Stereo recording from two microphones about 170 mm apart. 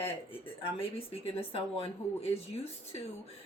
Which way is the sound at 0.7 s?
35° left (ahead or behind).